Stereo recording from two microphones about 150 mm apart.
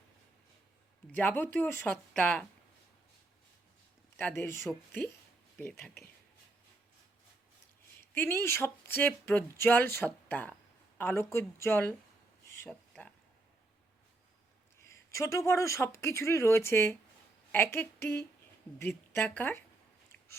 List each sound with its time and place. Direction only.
1.1 s speech: 10° left (ahead or behind)
4.2 s speech: 15° left (ahead or behind)
4.6 s speech: centre (ahead or behind)
8.1 s speech: 15° left (ahead or behind)
12.6 s a sound: 5° left (ahead or behind)
14.8 s speech: 20° left (ahead or behind)